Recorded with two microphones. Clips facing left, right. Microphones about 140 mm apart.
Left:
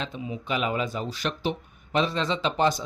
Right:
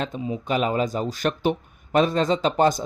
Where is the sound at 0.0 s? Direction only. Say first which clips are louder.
Right 5 dB; 40° right (ahead or behind).